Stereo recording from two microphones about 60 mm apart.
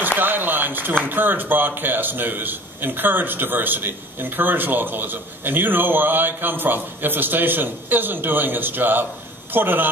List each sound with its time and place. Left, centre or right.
0.0 s speech: right